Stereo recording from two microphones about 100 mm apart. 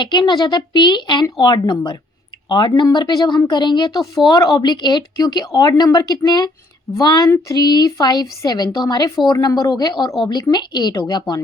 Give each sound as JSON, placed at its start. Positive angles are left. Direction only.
{"t": 0.0, "sound": "a woman's voice", "side_deg": 50}